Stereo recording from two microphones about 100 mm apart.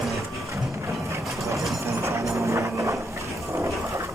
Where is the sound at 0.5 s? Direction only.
30° right (ahead or behind).